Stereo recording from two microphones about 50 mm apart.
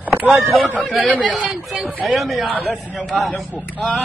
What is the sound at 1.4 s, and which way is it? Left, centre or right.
Chatter, centre.